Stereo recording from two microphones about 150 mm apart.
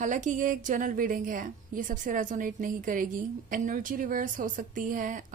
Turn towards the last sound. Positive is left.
turn(degrees=-65)  # may be behind; listen again after turning